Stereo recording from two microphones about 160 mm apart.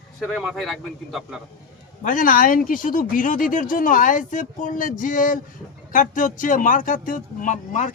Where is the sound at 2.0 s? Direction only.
55° left (ahead or behind).